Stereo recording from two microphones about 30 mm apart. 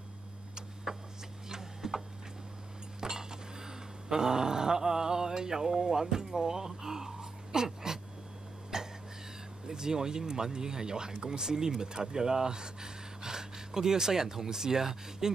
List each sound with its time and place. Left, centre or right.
0.9 s a sound: right
1.5 s printer: centre
3.0 s cutlery: right
8.7 s cough: centre
9.7 s speech: right